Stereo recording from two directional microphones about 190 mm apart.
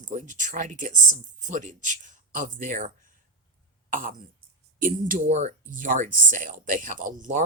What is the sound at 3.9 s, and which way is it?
Speech, 45° right (ahead or behind).